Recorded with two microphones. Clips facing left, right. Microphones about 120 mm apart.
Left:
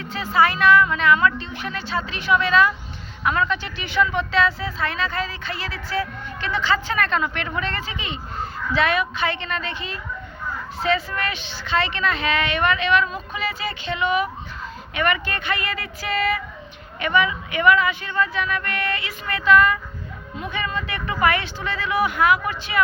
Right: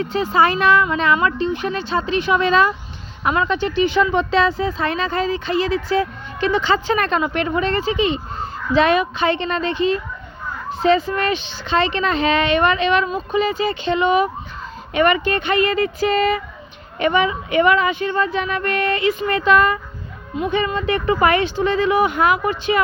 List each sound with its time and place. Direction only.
0.0 s speech: 20° right (ahead or behind)